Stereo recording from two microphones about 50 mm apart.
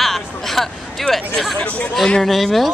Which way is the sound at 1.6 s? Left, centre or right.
Left.